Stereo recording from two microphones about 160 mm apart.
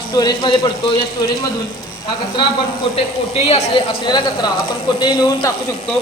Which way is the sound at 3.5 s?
30° left (ahead or behind).